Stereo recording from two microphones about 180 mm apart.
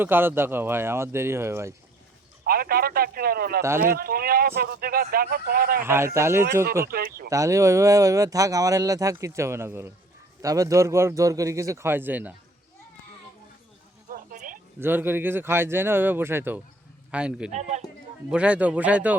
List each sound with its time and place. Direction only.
0.0 s speech: 10° right (ahead or behind)
2.5 s speech: 55° right (ahead or behind)
5.8 s speech: 15° right (ahead or behind)
6.8 s speech: 55° right (ahead or behind)
7.3 s speech: 15° right (ahead or behind)
14.1 s a sound: 50° right (ahead or behind)
14.8 s speech: 10° right (ahead or behind)
17.5 s speech: 40° right (ahead or behind)
18.3 s speech: 5° right (ahead or behind)